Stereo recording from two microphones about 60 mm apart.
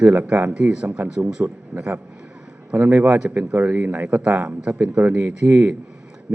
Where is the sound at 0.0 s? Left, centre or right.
Right.